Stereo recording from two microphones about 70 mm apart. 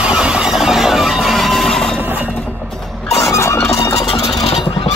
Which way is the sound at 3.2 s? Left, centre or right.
Left.